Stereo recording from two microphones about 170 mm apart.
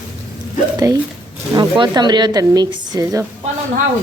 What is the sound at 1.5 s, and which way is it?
Speech, 25° right (ahead or behind).